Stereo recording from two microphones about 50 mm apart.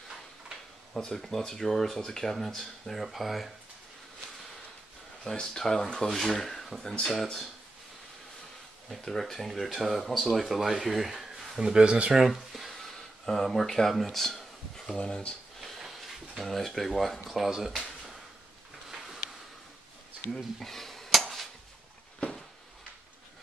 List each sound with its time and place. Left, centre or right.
0.9 s speech: centre
5.3 s speech: centre
8.8 s speech: centre
11.6 s speech: centre
14.9 s speech: centre
15.6 s speech: centre
18.9 s a sound: centre
20.2 s cap gun: centre